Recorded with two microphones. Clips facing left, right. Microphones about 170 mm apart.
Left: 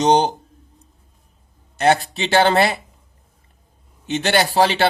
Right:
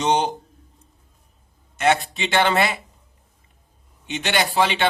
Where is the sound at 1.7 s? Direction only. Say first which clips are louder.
Left 3 dB; 35° left (ahead or behind).